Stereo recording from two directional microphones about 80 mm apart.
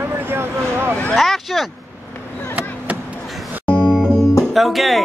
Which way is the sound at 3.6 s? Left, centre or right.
Centre.